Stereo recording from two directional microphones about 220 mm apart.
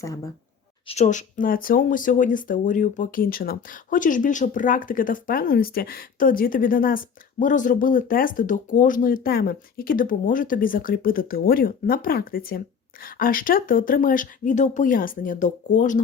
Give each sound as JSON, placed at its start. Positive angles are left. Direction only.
{"t": 0.9, "sound": "speech", "side_deg": 30}